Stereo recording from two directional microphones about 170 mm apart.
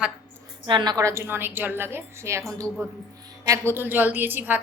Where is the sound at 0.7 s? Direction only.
25° right (ahead or behind).